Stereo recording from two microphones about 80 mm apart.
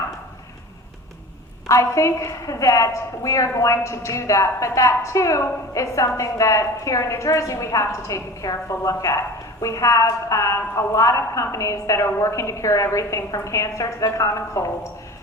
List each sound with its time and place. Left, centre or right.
1.6 s a woman's voice: left